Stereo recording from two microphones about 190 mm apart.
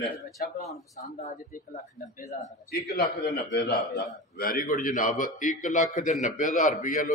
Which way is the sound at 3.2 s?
60° left (ahead or behind).